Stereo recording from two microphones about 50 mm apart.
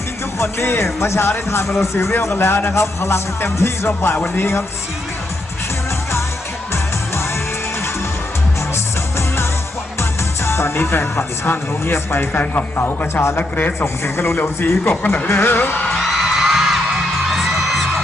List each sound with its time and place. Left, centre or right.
0.3 s music: left
1.5 s speech: left
2.2 s speech: left
2.7 s music: left
10.0 s speech: left
12.3 s a man's voice: left
13.7 s music: left
14.6 s speech: left
16.0 s music: centre